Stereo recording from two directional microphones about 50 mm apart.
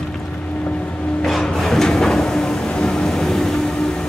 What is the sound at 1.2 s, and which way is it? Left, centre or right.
Music, centre.